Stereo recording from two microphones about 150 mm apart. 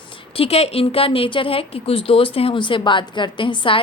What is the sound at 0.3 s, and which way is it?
A woman's voice, 40° left (ahead or behind).